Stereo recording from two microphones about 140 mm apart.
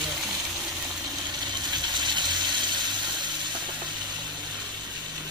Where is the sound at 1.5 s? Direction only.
30° right (ahead or behind).